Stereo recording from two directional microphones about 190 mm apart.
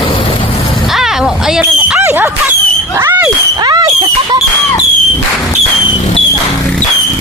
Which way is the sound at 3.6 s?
20° right (ahead or behind).